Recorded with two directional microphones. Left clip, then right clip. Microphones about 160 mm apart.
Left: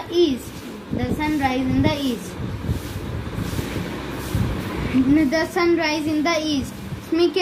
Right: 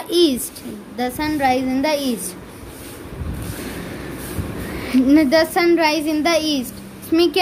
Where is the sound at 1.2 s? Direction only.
90° right.